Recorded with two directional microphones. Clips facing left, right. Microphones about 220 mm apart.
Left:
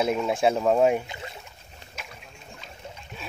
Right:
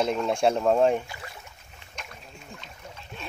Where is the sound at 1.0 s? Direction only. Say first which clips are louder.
Left 3 dB; 20° left (ahead or behind).